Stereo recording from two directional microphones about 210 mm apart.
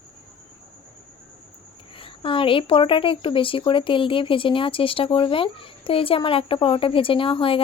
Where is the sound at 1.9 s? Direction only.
25° left (ahead or behind).